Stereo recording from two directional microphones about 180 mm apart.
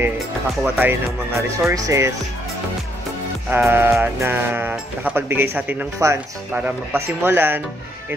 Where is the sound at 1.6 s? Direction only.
15° right (ahead or behind).